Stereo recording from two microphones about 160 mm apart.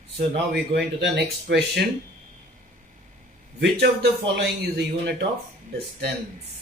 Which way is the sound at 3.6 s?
90° right.